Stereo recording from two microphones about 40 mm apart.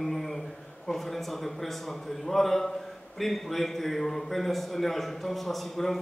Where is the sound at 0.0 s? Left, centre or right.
Centre.